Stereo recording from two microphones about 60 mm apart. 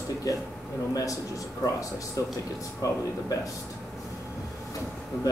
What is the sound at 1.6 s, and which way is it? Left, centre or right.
Speech, left.